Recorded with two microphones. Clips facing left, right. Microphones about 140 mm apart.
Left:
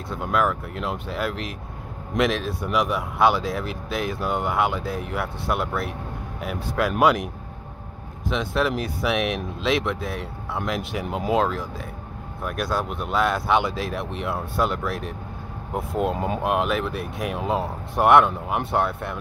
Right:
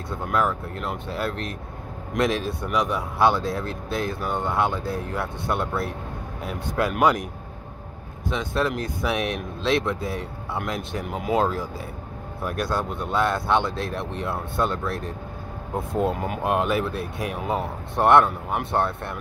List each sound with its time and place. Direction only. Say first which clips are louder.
0.3 s speech: left 1 dB; centre (ahead or behind)
8.4 s speech: left 1 dB; 5° left (ahead or behind)